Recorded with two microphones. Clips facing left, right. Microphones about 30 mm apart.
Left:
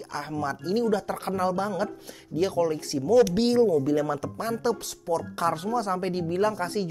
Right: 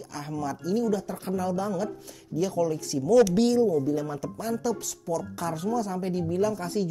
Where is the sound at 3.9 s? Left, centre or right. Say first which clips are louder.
Left 3 dB; left.